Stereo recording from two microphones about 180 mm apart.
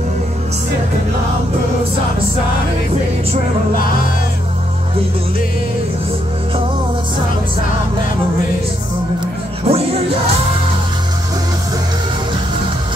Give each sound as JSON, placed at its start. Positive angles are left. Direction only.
{"t": 9.7, "sound": "music", "side_deg": -35}